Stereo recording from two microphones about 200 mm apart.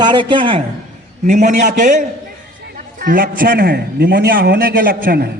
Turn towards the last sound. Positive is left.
turn(degrees=-50)  # may be behind; listen again after turning